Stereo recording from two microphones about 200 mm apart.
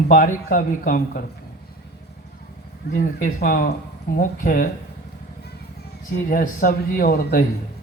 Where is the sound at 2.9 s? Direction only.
40° left (ahead or behind).